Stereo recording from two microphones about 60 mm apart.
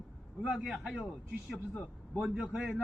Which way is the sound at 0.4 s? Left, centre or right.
Centre.